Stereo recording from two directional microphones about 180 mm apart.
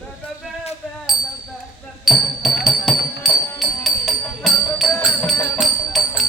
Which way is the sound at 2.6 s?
Centre (ahead or behind).